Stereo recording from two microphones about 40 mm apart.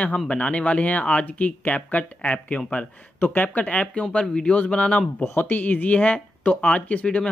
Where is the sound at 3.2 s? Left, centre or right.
Left.